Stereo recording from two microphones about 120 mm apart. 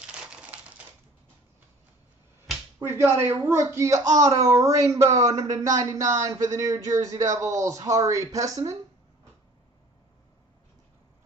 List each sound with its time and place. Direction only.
0.0 s typewriter: 10° right (ahead or behind)
2.9 s speech: 20° right (ahead or behind)